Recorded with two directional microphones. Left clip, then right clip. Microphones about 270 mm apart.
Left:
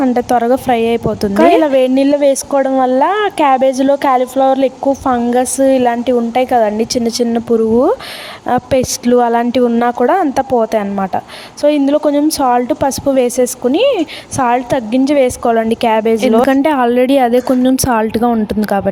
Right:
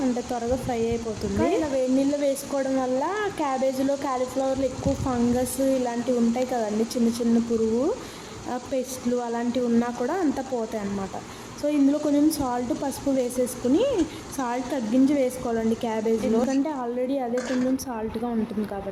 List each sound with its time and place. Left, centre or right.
0.3 s speech: left
8.4 s speech: left